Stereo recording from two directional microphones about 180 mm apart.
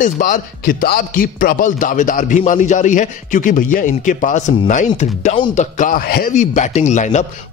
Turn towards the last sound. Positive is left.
turn(degrees=40)  # may be behind; listen again after turning